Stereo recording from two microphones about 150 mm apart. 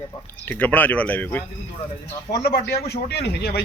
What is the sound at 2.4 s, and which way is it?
Speech, 90° left.